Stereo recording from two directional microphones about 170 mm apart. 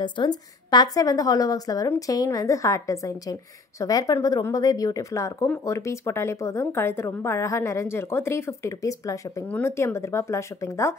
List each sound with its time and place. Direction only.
0.0 s a woman's voice: 25° left (ahead or behind)